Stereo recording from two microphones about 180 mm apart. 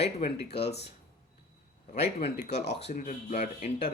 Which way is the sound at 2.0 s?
70° left (ahead or behind).